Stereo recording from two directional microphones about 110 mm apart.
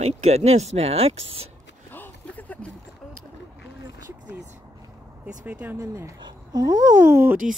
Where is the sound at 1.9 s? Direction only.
15° left (ahead or behind).